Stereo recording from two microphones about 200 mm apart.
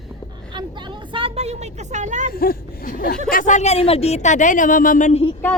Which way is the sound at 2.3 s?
45° left (ahead or behind).